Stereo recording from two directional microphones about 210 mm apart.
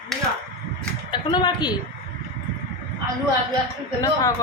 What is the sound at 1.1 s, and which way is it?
Speech, 20° left (ahead or behind).